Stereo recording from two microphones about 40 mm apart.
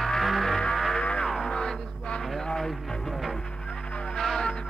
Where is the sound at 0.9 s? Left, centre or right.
Left.